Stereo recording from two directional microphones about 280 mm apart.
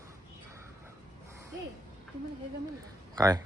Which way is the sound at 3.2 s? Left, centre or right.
Centre.